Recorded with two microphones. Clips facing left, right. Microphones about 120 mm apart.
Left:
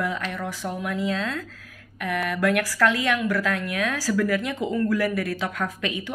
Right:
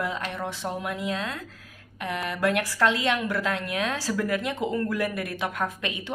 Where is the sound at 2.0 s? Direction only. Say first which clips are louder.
Left 3 dB; 25° right (ahead or behind).